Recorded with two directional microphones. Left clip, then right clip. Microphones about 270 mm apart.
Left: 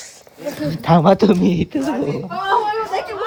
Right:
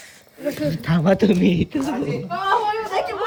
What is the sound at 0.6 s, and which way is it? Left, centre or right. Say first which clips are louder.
Speech: left 12 dB; centre.